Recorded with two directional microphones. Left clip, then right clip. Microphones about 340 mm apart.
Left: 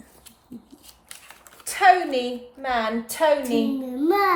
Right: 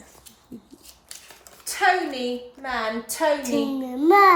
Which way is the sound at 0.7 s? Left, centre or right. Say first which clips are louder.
Right 1 dB; centre.